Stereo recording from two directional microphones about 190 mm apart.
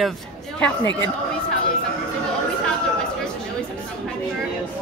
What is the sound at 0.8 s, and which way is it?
Speech, 70° left (ahead or behind).